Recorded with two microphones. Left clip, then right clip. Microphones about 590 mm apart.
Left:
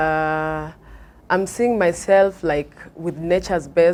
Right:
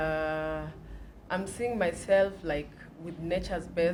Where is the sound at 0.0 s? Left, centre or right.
Left.